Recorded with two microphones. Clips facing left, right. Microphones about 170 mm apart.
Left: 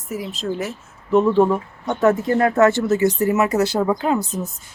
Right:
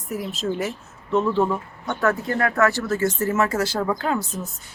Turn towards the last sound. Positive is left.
turn(degrees=0)  # may be behind; listen again after turning